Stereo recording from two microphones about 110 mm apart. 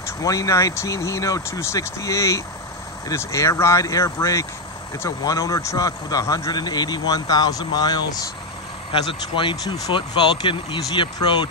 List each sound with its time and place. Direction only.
0.2 s a man's voice: 30° left (ahead or behind)
8.9 s speech: 50° left (ahead or behind)